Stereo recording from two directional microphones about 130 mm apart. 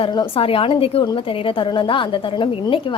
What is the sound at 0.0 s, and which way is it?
A woman's voice, 40° left (ahead or behind).